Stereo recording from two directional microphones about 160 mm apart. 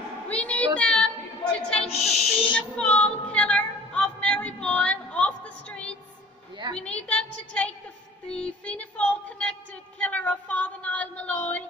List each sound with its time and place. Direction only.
0.3 s a sound: 10° left (ahead or behind)
0.7 s child singing: 5° left (ahead or behind)
2.1 s owl: 40° left (ahead or behind)
2.5 s female singing: 5° left (ahead or behind)
6.8 s a woman's voice: 5° left (ahead or behind)
8.3 s a sound: 5° left (ahead or behind)